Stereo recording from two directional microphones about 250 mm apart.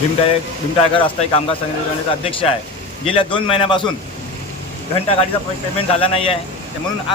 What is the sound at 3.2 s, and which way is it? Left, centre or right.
Speech, centre.